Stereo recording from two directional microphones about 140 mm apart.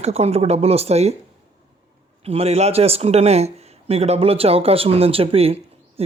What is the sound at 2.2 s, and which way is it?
Speech, 45° right (ahead or behind).